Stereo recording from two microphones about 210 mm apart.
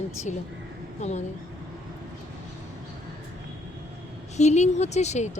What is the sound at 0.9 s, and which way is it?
Speech, 35° left (ahead or behind).